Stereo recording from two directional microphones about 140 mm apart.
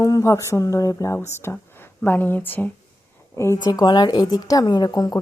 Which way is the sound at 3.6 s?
30° left (ahead or behind).